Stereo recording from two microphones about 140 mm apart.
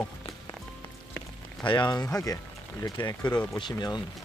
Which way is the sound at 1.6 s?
35° left (ahead or behind).